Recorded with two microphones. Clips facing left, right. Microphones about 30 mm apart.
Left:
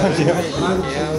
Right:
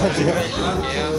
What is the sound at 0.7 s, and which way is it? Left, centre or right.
Speech, centre.